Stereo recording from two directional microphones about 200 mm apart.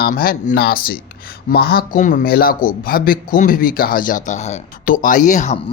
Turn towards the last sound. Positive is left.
turn(degrees=35)  # may be behind; listen again after turning